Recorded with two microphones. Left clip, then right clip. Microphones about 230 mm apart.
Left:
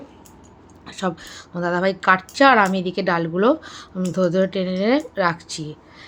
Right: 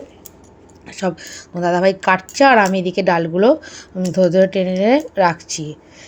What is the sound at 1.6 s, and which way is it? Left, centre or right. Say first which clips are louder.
Speech: right 4 dB; centre.